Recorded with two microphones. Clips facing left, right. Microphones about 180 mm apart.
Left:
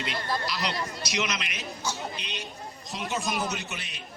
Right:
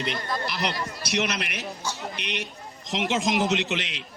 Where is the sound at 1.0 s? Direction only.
60° right (ahead or behind).